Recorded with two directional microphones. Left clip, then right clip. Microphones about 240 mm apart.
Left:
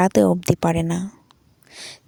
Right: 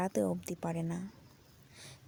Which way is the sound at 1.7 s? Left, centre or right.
Left.